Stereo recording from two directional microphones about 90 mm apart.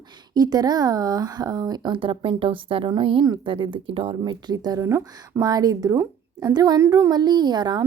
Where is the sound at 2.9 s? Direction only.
70° right (ahead or behind); by 4.2 s 90° right.